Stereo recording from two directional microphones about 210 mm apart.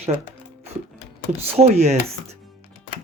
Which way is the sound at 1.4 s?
30° right (ahead or behind).